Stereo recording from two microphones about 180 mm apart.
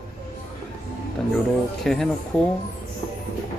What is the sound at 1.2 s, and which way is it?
Speech, centre (ahead or behind).